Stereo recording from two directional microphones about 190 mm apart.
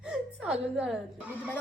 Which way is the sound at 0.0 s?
5° right (ahead or behind).